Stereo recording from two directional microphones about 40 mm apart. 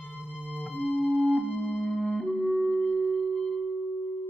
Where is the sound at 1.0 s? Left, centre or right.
Left.